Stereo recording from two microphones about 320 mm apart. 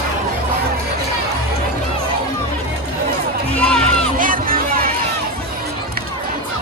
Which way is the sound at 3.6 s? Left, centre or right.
Centre.